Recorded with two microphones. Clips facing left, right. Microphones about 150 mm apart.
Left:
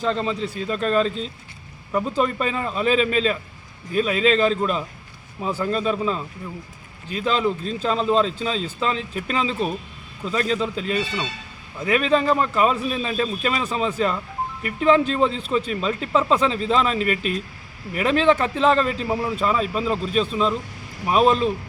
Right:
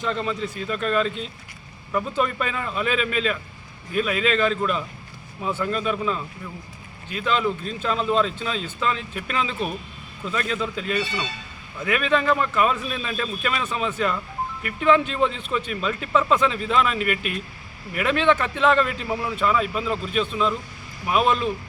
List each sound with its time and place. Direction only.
0.0 s speech: 35° left (ahead or behind)